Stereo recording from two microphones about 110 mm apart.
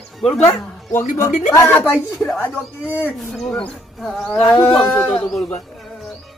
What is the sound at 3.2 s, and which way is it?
Speech, 5° left (ahead or behind).